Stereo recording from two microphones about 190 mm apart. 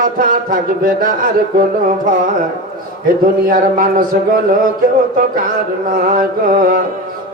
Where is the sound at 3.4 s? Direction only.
45° right (ahead or behind).